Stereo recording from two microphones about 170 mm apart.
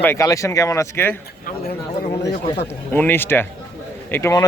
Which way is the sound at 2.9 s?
10° left (ahead or behind).